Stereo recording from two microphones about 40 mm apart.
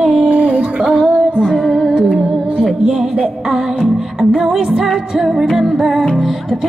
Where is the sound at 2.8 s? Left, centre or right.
Right.